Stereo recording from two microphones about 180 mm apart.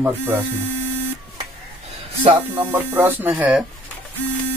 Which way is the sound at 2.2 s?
25° right (ahead or behind).